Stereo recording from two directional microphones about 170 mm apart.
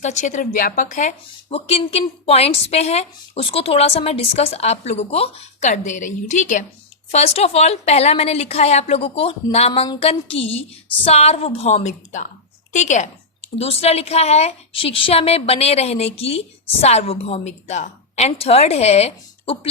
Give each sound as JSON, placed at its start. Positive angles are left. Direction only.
{"t": 0.0, "sound": "a woman's voice", "side_deg": 45}